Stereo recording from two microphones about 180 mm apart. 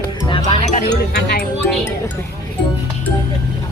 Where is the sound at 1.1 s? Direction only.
65° left (ahead or behind).